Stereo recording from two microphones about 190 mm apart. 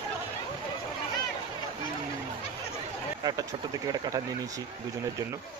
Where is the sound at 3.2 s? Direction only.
20° right (ahead or behind).